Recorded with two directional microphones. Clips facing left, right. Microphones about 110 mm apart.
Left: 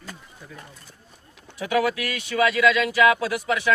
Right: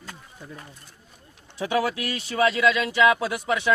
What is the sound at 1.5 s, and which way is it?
Speech, 30° right (ahead or behind).